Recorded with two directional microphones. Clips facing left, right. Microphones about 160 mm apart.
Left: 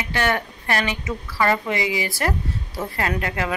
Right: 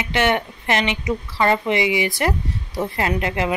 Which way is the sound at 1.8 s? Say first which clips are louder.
Right 4 dB; 35° left (ahead or behind).